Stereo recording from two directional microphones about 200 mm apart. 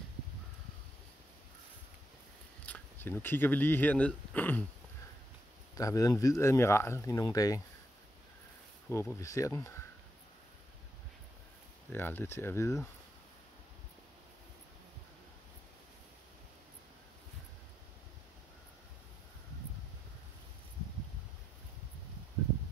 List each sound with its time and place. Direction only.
2.6 s speech: 10° left (ahead or behind)
5.8 s speech: 15° left (ahead or behind)
8.8 s speech: 10° left (ahead or behind)
11.9 s speech: 10° left (ahead or behind)